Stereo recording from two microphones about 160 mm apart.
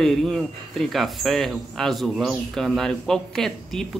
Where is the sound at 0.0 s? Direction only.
Centre (ahead or behind).